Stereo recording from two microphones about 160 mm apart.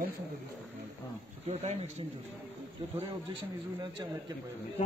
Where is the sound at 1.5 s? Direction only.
40° right (ahead or behind).